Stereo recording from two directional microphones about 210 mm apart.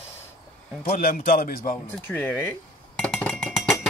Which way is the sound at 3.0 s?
5° left (ahead or behind).